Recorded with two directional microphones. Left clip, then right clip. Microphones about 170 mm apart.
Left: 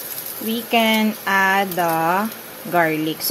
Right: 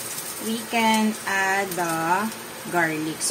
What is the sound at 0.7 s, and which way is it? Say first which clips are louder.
Speech: left 4 dB; 55° left (ahead or behind).